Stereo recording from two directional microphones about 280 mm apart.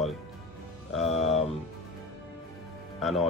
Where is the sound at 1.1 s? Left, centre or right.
Left.